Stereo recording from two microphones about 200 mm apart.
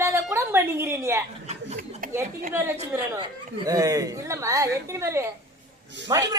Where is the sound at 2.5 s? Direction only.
10° right (ahead or behind).